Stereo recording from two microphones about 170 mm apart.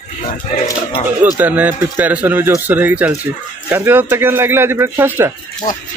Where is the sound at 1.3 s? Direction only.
10° right (ahead or behind).